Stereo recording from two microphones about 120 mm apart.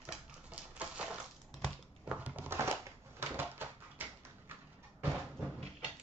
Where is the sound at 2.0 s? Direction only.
15° right (ahead or behind).